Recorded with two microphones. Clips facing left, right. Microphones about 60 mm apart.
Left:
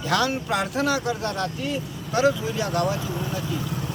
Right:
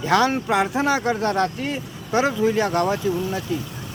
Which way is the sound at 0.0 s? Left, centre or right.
Right.